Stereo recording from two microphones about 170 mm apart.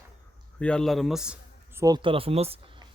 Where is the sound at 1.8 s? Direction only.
25° right (ahead or behind).